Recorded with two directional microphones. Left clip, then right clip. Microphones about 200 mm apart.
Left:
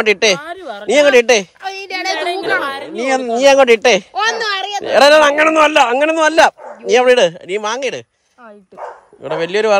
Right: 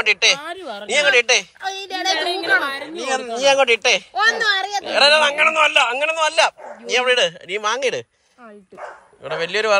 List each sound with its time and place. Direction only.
0.0 s speech: 50° left (ahead or behind)
0.4 s speech: 30° left (ahead or behind)
0.8 s speech: 45° left (ahead or behind)
1.9 s speech: 35° left (ahead or behind)
3.1 s speech: 55° left (ahead or behind); by 8.0 s 25° left (ahead or behind)
9.2 s speech: 35° left (ahead or behind)